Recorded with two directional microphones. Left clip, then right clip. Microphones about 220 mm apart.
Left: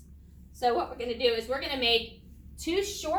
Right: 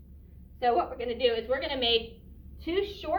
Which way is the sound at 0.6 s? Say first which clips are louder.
Right 1 dB; 10° left (ahead or behind).